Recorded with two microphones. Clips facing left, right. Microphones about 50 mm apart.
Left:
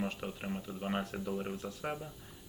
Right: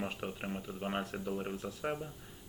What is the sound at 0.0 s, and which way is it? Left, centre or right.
Speech, centre.